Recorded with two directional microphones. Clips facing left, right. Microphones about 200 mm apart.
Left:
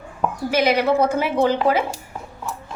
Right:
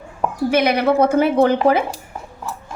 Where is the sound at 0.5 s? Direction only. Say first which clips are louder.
Right 2 dB; 60° right (ahead or behind).